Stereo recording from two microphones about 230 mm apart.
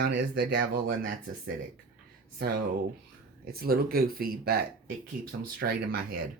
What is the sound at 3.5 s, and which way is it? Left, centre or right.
Speech, right.